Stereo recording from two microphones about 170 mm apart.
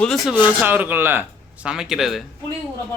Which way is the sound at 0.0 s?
Centre (ahead or behind).